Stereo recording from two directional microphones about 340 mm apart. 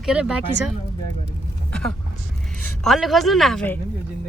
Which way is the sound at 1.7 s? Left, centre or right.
Centre.